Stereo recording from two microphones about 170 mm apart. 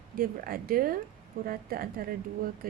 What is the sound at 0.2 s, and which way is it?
Speech, 60° right (ahead or behind).